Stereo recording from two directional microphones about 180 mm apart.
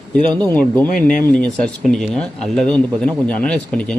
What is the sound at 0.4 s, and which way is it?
Speech, 10° left (ahead or behind).